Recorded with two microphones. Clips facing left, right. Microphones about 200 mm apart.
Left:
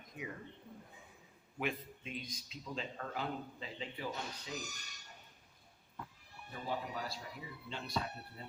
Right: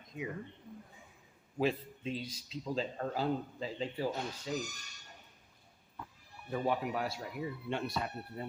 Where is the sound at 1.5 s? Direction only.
30° right (ahead or behind).